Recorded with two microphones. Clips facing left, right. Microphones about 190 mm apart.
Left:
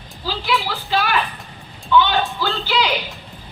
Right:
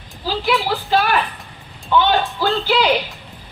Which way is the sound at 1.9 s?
45° right (ahead or behind).